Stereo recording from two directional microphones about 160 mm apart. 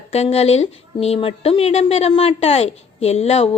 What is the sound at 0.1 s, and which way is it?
A woman's voice, 40° left (ahead or behind).